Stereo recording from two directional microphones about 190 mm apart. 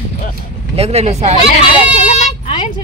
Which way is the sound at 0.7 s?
35° right (ahead or behind).